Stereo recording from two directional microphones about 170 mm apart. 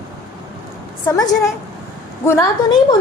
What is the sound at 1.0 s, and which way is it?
A woman's voice, 20° left (ahead or behind).